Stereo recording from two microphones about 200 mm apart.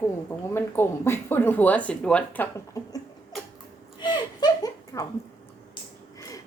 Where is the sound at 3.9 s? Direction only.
20° left (ahead or behind).